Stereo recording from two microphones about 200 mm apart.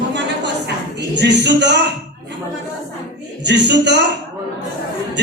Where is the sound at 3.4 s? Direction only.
60° right (ahead or behind).